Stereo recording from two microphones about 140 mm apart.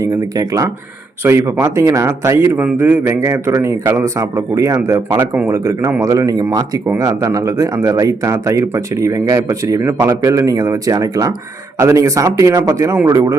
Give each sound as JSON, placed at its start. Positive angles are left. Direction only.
{"t": 0.0, "sound": "speech", "side_deg": -25}